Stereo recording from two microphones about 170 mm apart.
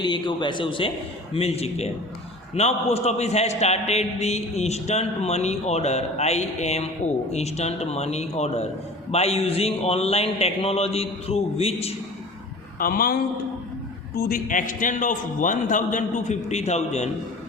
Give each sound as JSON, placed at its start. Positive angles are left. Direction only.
{"t": 0.0, "sound": "a man's voice", "side_deg": 30}
{"t": 12.8, "sound": "a man's voice", "side_deg": 60}
{"t": 14.2, "sound": "a man's voice", "side_deg": 55}